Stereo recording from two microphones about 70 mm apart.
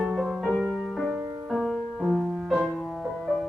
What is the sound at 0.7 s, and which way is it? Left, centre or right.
Music, centre.